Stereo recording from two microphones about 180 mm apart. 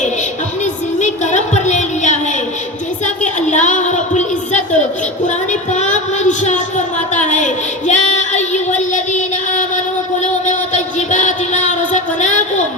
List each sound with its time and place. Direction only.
0.6 s music: 40° left (ahead or behind)
3.5 s a sound: 40° left (ahead or behind)
10.4 s music: 45° left (ahead or behind)